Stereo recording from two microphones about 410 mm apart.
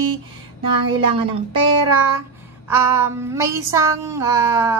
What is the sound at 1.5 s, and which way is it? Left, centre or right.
Child singing, right.